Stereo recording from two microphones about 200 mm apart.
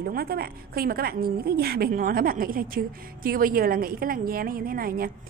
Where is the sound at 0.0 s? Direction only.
50° right (ahead or behind).